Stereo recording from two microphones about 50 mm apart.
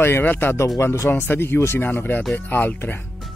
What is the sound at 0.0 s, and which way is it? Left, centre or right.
Speech, left.